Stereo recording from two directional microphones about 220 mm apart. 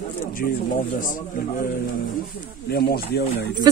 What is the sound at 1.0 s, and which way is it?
Speech, 40° left (ahead or behind).